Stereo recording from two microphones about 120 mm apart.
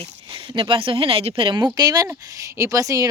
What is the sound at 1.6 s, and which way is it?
Speech, 30° right (ahead or behind).